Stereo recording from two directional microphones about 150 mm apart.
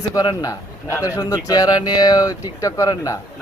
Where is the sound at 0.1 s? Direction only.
25° left (ahead or behind).